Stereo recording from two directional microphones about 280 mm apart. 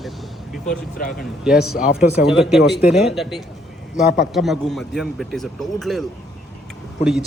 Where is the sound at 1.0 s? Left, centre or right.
Left.